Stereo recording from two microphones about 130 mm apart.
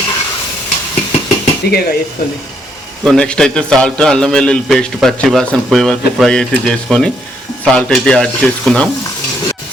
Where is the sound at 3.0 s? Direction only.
5° left (ahead or behind).